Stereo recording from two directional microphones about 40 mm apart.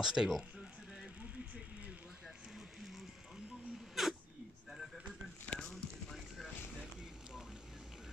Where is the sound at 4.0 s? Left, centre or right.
Centre.